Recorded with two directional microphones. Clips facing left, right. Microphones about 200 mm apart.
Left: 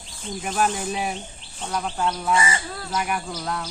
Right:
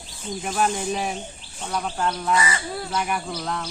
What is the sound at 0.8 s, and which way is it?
Speech, 5° left (ahead or behind).